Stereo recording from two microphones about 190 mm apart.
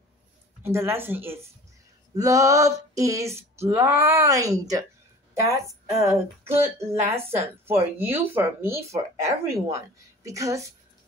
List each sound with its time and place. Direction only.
0.7 s speech: 15° right (ahead or behind)
5.9 s speech: 15° right (ahead or behind)